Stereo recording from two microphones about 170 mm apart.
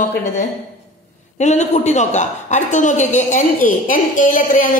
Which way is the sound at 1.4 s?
45° left (ahead or behind).